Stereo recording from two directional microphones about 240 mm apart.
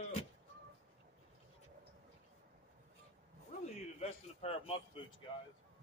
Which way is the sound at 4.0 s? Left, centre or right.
Left.